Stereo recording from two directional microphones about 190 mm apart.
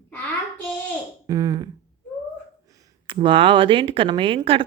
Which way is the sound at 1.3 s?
20° right (ahead or behind).